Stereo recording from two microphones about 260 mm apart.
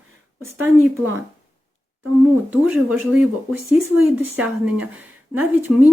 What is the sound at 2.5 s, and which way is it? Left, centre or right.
A woman's voice, centre.